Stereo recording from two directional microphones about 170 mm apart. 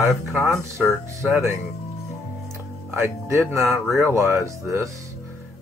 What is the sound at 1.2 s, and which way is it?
Speech, 15° right (ahead or behind).